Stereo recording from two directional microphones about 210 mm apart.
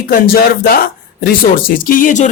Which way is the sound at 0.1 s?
45° left (ahead or behind).